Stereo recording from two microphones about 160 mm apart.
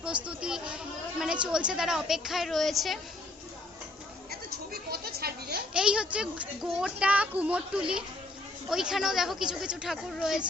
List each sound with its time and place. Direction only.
0.0 s a woman's voice: 5° right (ahead or behind)
4.3 s a sound: 75° right (ahead or behind)
5.7 s a woman's voice: 5° right (ahead or behind)